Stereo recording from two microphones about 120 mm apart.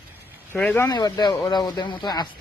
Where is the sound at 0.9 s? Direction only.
35° left (ahead or behind).